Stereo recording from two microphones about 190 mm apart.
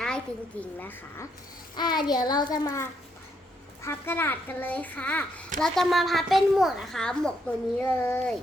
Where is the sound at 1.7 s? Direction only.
20° left (ahead or behind).